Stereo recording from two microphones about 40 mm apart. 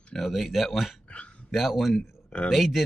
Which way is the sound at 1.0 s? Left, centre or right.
Left.